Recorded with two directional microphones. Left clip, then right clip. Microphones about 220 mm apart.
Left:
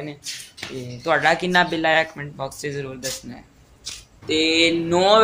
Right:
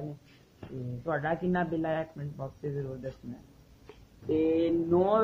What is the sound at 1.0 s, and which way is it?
Speech, 15° left (ahead or behind).